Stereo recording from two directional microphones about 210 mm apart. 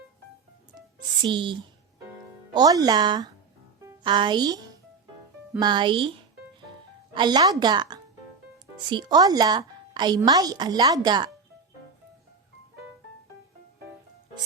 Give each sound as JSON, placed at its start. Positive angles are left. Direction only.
{"t": 0.9, "sound": "speech", "side_deg": -25}
{"t": 2.0, "sound": "music", "side_deg": -20}
{"t": 5.5, "sound": "a woman's voice", "side_deg": -20}